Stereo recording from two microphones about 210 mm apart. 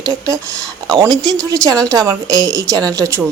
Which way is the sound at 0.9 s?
20° right (ahead or behind).